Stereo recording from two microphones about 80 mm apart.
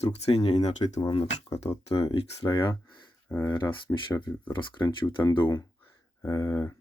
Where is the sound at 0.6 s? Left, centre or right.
Left.